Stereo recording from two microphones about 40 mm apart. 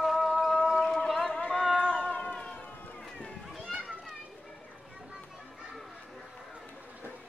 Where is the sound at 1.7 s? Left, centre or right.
Right.